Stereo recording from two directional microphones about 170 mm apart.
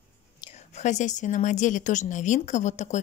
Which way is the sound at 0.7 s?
45° left (ahead or behind).